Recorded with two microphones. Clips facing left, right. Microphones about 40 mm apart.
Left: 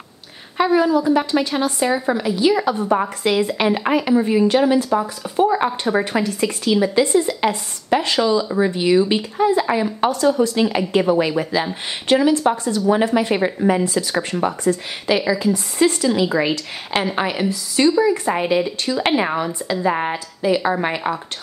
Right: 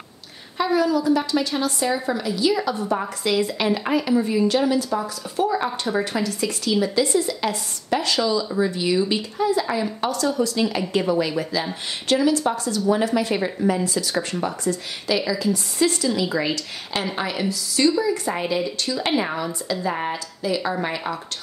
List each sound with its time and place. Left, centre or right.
0.7 s a woman's voice: left
2.9 s speech: left
3.3 s speech: left
3.8 s a woman's voice: left; by 6.8 s centre
6.8 s a woman's voice: left
14.6 s a woman's voice: left
19.0 s speech: left
19.8 s speech: left